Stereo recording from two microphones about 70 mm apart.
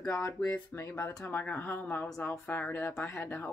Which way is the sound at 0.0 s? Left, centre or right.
Left.